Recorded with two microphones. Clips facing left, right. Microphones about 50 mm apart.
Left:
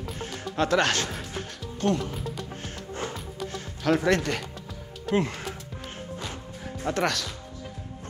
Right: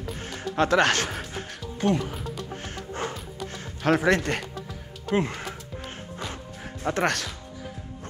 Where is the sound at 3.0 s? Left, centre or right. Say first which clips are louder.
Right 2 dB; right.